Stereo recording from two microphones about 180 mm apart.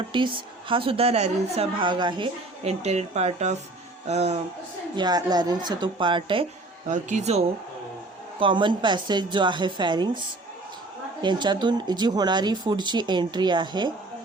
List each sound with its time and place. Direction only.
0.1 s a woman's voice: 30° right (ahead or behind)
4.9 s speech: 25° right (ahead or behind)
6.8 s a woman's voice: 40° right (ahead or behind); by 10.1 s 25° right (ahead or behind)
11.2 s speech: 25° right (ahead or behind)